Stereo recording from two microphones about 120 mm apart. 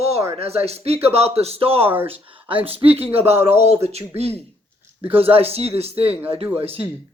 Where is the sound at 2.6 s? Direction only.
55° right (ahead or behind).